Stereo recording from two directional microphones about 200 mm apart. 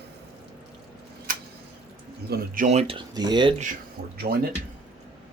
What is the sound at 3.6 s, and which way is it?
Speech, 45° right (ahead or behind).